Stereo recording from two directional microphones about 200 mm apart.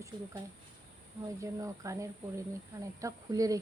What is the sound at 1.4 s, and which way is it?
Speech, 15° right (ahead or behind).